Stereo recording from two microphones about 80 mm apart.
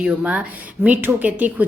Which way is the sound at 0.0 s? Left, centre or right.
Centre.